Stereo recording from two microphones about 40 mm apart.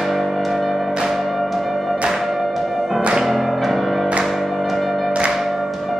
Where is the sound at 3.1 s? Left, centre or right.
Centre.